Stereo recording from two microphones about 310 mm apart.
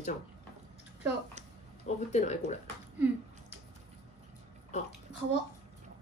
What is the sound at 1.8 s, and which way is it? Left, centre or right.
Speech, left.